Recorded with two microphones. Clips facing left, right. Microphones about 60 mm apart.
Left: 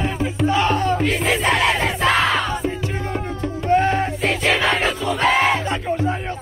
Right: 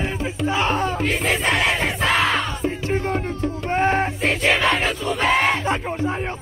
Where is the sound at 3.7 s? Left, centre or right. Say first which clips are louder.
Left 3 dB; right.